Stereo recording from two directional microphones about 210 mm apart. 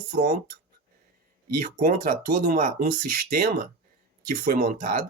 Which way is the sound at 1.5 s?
40° right (ahead or behind).